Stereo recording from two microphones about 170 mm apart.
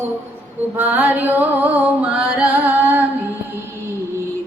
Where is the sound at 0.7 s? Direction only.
10° right (ahead or behind).